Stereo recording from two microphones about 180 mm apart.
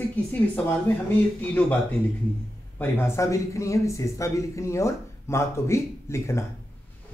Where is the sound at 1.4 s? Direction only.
10° left (ahead or behind).